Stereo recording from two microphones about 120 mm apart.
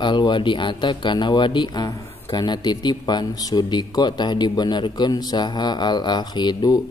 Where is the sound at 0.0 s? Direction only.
40° left (ahead or behind).